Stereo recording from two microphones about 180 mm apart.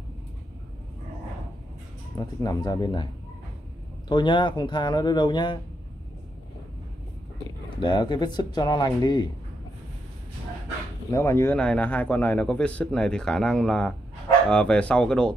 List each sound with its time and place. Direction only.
2.1 s speech: 20° left (ahead or behind)
4.1 s speech: 25° left (ahead or behind)
7.8 s speech: 25° left (ahead or behind)
11.1 s a man's voice: 15° left (ahead or behind)